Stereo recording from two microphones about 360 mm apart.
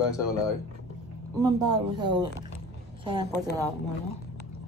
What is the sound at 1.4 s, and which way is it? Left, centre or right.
Speech, centre.